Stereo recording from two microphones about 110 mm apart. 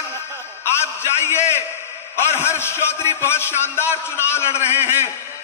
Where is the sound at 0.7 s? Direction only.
20° left (ahead or behind).